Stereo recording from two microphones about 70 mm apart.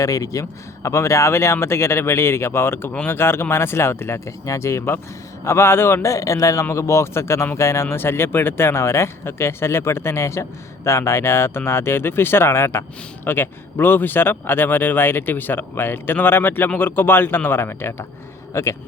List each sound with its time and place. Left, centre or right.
0.0 s a man's voice: left